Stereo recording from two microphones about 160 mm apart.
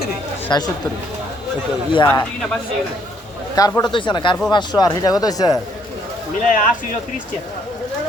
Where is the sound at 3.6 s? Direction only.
25° left (ahead or behind).